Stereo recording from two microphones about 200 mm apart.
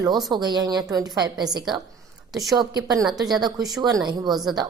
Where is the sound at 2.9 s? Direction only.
20° right (ahead or behind).